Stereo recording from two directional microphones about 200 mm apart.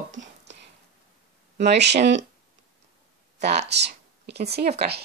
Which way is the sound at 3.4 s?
55° right (ahead or behind).